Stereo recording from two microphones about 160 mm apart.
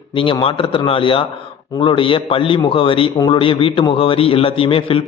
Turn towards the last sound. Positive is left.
turn(degrees=35)  # may be behind; listen again after turning